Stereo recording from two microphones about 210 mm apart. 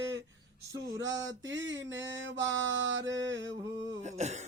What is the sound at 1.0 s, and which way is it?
Mantra, 60° right (ahead or behind).